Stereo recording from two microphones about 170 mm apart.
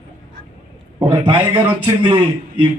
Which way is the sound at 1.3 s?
30° right (ahead or behind).